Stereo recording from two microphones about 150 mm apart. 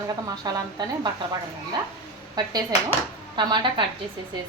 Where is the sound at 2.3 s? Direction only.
25° right (ahead or behind).